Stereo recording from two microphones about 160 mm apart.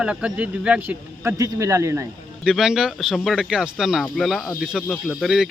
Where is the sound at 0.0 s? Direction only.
5° right (ahead or behind).